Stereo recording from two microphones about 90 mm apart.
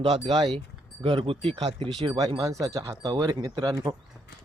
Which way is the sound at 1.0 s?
85° right.